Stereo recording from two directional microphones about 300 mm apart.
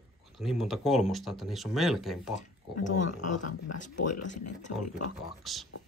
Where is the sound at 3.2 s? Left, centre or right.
Left.